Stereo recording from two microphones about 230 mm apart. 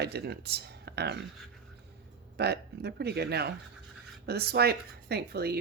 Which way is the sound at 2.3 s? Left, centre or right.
Right.